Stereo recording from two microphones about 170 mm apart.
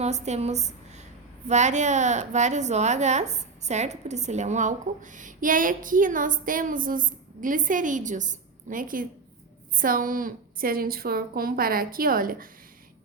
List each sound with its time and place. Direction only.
0.0 s a woman's voice: 40° right (ahead or behind); by 12.5 s 55° right (ahead or behind)